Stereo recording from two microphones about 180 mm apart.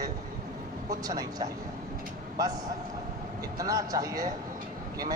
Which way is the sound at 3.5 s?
20° right (ahead or behind).